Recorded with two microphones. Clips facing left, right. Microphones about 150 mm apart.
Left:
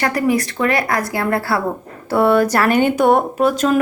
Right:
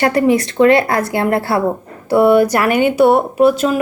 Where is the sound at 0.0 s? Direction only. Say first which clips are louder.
Right 4 dB; 25° right (ahead or behind).